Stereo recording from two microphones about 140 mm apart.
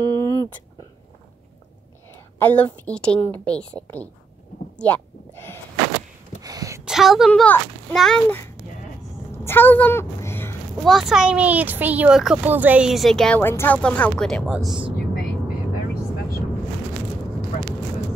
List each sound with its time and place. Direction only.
0.0 s a sound: 20° left (ahead or behind)
2.3 s a woman's voice: 10° left (ahead or behind)
6.4 s a sound: 25° right (ahead or behind)
6.8 s speech: 5° right (ahead or behind)
9.3 s a woman's voice: 15° left (ahead or behind)
10.8 s a woman's voice: centre (ahead or behind)
13.4 s a woman's voice: 15° left (ahead or behind); by 14.6 s centre (ahead or behind)
14.6 s speech: 35° right (ahead or behind)